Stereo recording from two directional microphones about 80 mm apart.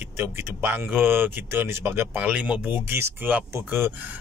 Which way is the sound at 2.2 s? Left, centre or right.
Centre.